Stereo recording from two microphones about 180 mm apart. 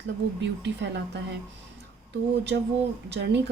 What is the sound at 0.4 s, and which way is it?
Speech, 75° right (ahead or behind).